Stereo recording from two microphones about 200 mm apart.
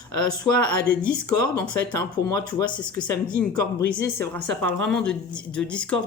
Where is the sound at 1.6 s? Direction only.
10° left (ahead or behind).